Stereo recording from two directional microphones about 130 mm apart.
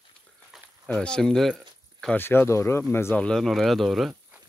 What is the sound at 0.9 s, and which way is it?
Speech, 5° left (ahead or behind).